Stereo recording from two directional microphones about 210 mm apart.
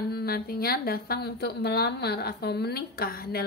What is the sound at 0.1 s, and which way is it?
A woman's voice, 50° left (ahead or behind).